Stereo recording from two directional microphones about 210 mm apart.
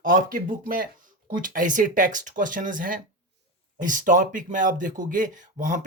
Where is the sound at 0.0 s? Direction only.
40° right (ahead or behind).